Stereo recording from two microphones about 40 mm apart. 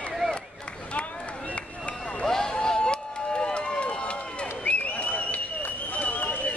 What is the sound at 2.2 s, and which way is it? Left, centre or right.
Run, centre.